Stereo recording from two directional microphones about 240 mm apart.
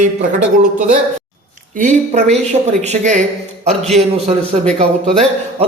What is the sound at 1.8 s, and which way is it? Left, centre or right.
A woman's voice, right.